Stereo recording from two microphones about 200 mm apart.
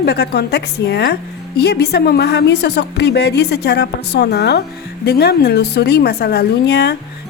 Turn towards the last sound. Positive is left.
turn(degrees=55)  # may be behind; listen again after turning